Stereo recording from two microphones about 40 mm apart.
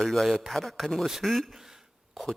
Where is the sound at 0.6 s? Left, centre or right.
Centre.